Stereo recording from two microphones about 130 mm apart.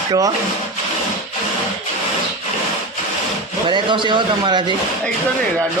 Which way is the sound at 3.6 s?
40° right (ahead or behind).